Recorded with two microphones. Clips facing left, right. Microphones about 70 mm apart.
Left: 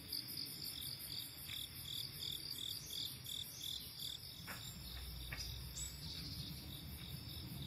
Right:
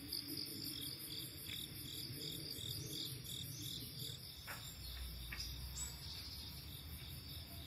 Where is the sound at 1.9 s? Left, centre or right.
Left.